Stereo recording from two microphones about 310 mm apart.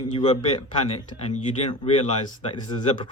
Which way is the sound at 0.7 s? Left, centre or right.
Centre.